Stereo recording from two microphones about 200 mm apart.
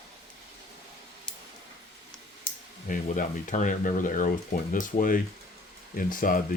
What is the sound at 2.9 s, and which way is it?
Speech, 40° left (ahead or behind).